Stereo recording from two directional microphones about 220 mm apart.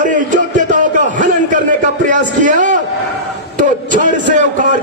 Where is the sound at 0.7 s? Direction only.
35° right (ahead or behind).